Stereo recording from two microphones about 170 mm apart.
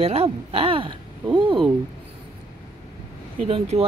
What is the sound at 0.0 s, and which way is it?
Speech, 35° right (ahead or behind).